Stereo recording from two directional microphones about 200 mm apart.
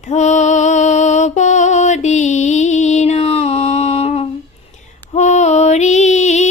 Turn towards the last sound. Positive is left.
turn(degrees=35)  # may be behind; listen again after turning